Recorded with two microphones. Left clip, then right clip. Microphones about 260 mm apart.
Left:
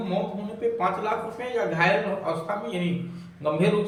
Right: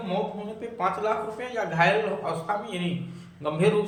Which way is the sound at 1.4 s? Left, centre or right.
Centre.